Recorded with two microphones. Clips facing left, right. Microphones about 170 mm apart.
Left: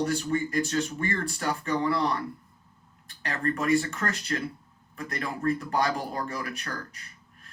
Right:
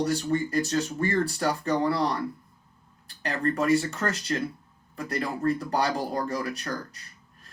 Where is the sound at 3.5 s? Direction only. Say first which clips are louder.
Right 1 dB; 30° right (ahead or behind).